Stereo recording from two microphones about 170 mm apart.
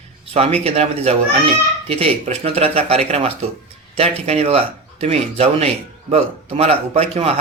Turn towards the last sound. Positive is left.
turn(degrees=-35)  # may be behind; listen again after turning